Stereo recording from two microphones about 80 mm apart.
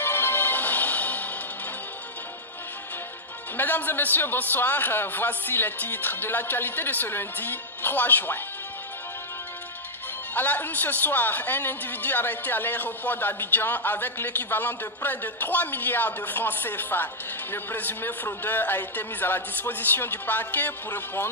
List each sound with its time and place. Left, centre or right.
0.0 s music: left
3.5 s a man's voice: left
10.3 s a man's voice: left